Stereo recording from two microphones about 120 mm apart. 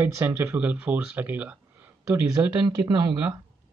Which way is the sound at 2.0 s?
25° right (ahead or behind).